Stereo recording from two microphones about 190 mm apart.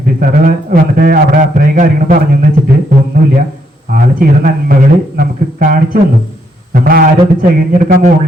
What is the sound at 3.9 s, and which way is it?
Speech, 50° right (ahead or behind).